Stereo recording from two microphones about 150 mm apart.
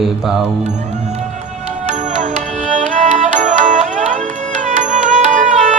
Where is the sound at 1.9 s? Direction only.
55° right (ahead or behind).